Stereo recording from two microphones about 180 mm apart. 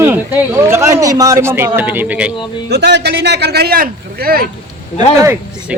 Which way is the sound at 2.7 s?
70° right (ahead or behind).